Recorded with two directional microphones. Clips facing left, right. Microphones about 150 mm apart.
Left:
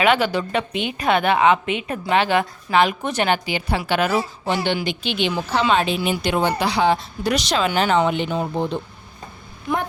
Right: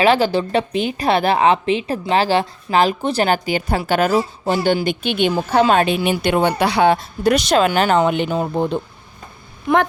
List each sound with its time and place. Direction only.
0.0 s a woman's voice: 30° right (ahead or behind); by 9.8 s 55° right (ahead or behind)